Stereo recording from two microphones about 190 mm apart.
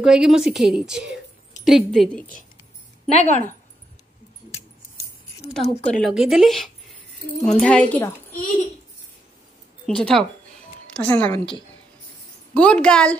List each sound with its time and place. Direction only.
0.0 s a woman's voice: 5° right (ahead or behind)
3.1 s speech: 35° left (ahead or behind)
5.9 s a woman's voice: centre (ahead or behind)
8.3 s a sound: 50° left (ahead or behind)
9.8 s a woman's voice: 5° left (ahead or behind)
12.5 s a woman's voice: 5° left (ahead or behind)